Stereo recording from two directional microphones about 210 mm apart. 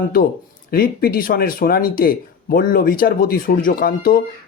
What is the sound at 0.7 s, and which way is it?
Speech, 45° left (ahead or behind).